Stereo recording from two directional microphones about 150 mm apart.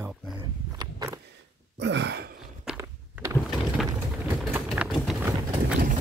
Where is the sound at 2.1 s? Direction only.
90° right.